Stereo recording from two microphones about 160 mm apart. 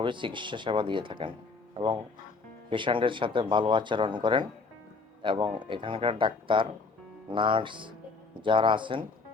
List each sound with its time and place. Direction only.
0.0 s speech: 30° right (ahead or behind)
2.6 s speech: 30° right (ahead or behind)